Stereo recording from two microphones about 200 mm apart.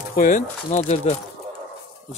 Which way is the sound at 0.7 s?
35° left (ahead or behind).